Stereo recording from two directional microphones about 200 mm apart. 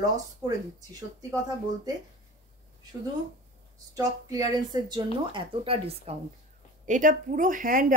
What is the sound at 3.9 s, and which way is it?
A woman's voice, 20° right (ahead or behind).